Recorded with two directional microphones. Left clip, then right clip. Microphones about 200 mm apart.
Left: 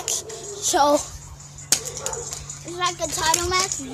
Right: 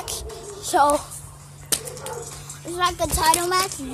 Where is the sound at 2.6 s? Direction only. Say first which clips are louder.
Right 3 dB; 30° right (ahead or behind).